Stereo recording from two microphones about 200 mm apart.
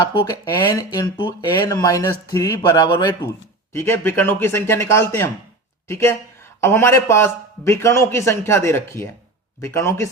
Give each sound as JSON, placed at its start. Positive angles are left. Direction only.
{"t": 0.1, "sound": "a man's voice", "side_deg": 20}